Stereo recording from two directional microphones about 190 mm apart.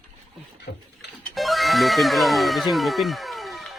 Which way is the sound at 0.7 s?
60° left (ahead or behind).